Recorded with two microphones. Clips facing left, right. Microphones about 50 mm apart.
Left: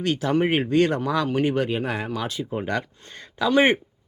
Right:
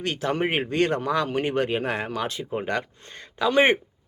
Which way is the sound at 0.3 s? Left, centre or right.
Centre.